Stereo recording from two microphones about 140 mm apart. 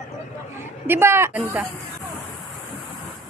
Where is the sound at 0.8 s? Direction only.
15° right (ahead or behind).